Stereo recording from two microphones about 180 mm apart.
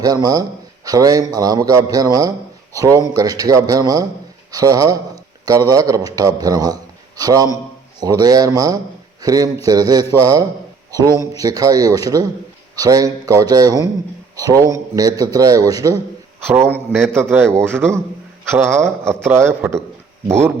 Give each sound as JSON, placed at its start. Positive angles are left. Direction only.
{"t": 0.0, "sound": "a man's voice", "side_deg": -20}